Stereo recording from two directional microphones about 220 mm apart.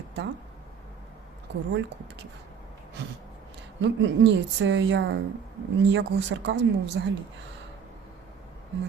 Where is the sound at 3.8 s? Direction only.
55° right (ahead or behind).